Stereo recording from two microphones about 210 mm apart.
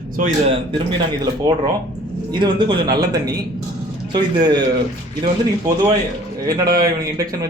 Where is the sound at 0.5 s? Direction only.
25° right (ahead or behind).